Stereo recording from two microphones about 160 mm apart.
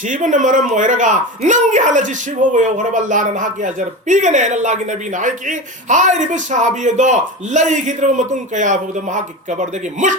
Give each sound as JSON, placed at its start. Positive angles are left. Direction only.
{"t": 0.1, "sound": "speech", "side_deg": -55}